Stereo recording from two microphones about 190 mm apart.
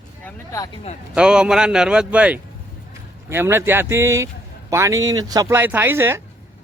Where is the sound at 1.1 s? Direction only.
5° right (ahead or behind).